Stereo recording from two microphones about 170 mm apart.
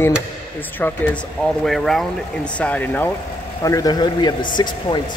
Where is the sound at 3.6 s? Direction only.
20° left (ahead or behind).